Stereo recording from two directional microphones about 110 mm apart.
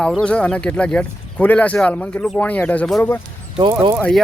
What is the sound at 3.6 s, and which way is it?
Speech, 50° right (ahead or behind).